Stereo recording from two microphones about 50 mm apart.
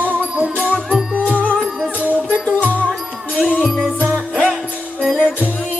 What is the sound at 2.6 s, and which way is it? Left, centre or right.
Music, right.